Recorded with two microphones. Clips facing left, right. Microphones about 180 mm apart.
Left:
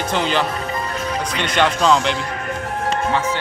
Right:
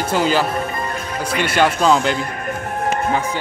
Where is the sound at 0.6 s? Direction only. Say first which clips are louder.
Even; 55° right (ahead or behind).